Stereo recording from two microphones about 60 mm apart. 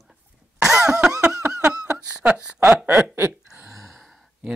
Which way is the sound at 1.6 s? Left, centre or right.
Centre.